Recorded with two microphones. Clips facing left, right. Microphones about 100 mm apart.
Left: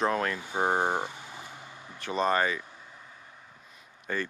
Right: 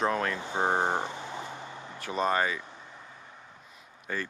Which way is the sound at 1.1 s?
65° right (ahead or behind).